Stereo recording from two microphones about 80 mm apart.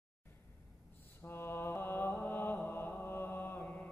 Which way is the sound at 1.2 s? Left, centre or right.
Left.